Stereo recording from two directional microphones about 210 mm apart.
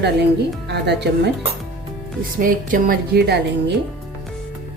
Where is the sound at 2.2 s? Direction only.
40° right (ahead or behind).